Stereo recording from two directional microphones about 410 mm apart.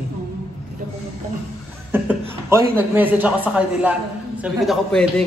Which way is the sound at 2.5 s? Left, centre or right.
Centre.